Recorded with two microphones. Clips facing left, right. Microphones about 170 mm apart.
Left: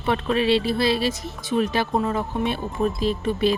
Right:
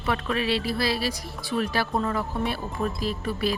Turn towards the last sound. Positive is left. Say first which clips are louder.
# left 6 dB
turn(degrees=25)  # may be behind; listen again after turning